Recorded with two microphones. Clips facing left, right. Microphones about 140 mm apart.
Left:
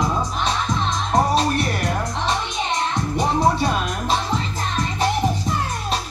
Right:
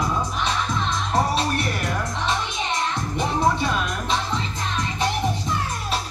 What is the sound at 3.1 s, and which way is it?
Music, 40° left (ahead or behind).